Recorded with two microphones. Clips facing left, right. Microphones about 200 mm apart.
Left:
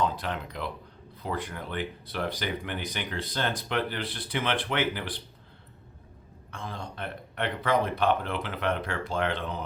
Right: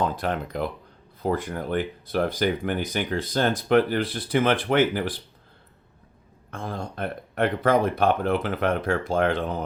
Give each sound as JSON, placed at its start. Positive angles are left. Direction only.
{"t": 0.0, "sound": "speech", "side_deg": -50}
{"t": 6.5, "sound": "speech", "side_deg": -50}